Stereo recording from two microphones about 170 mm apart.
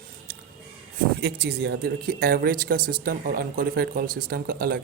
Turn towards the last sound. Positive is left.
turn(degrees=-60)  # may be behind; listen again after turning